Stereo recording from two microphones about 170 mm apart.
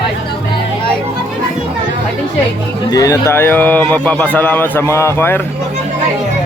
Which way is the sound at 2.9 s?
20° left (ahead or behind).